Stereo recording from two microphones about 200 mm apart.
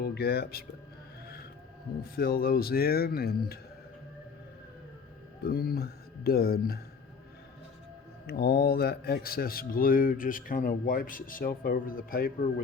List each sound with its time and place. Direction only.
0.0 s speech: 50° left (ahead or behind)
2.1 s speech: 50° left (ahead or behind)
5.4 s speech: 50° left (ahead or behind)
8.3 s speech: 50° left (ahead or behind)